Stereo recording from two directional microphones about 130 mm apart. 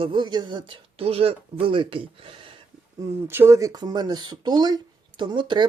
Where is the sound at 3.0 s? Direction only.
20° right (ahead or behind).